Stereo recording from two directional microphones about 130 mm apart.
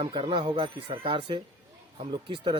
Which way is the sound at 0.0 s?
40° right (ahead or behind).